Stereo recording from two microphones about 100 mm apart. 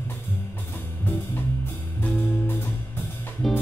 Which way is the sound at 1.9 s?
20° left (ahead or behind).